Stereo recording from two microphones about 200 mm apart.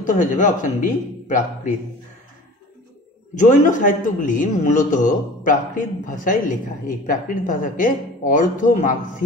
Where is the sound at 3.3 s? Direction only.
40° left (ahead or behind).